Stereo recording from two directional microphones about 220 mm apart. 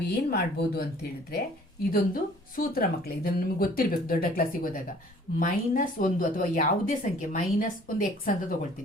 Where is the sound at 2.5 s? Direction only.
40° left (ahead or behind).